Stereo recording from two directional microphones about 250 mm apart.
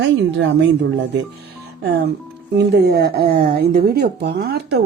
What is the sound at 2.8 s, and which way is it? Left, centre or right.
A woman's voice, right.